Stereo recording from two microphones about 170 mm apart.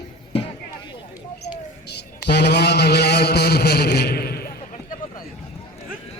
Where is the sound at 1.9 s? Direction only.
75° left (ahead or behind).